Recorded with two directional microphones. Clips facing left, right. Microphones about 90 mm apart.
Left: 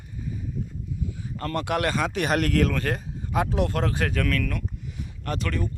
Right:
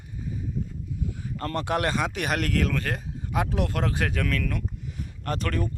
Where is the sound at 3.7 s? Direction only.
15° right (ahead or behind).